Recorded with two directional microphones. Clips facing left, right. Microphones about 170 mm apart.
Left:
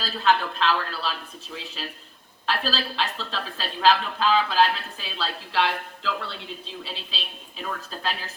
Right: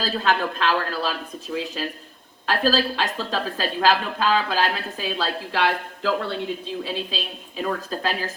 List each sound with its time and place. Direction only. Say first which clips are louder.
0.0 s speech: right 1 dB; 50° right (ahead or behind)